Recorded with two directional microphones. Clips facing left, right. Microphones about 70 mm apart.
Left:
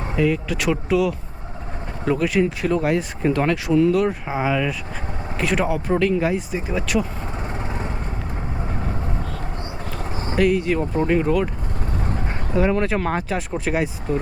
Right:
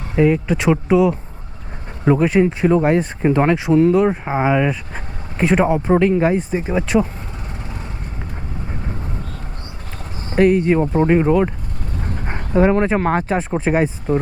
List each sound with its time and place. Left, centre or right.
0.2 s speech: right
10.3 s speech: right